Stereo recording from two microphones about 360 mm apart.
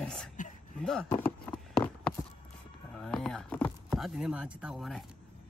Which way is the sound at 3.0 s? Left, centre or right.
Centre.